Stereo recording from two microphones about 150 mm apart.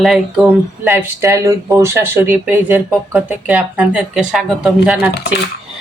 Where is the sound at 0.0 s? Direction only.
Centre (ahead or behind).